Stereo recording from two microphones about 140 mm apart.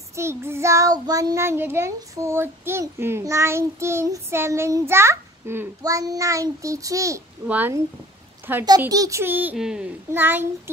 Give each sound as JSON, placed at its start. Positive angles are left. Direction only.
{"t": 0.1, "sound": "child singing", "side_deg": -20}
{"t": 7.4, "sound": "speech", "side_deg": -10}
{"t": 8.6, "sound": "child singing", "side_deg": -25}
{"t": 9.6, "sound": "a child's voice", "side_deg": -5}
{"t": 10.1, "sound": "speech", "side_deg": -15}